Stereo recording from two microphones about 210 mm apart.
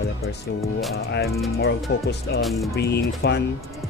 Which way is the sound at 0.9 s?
50° left (ahead or behind).